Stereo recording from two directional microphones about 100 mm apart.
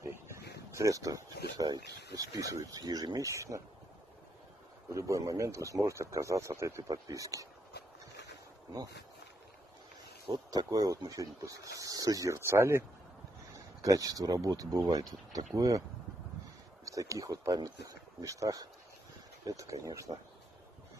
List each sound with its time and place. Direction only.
0.7 s speech: 35° right (ahead or behind)
4.9 s speech: 30° right (ahead or behind)
10.2 s speech: 50° right (ahead or behind); by 12.8 s 25° right (ahead or behind)
13.8 s speech: 35° right (ahead or behind)
16.8 s speech: 35° right (ahead or behind)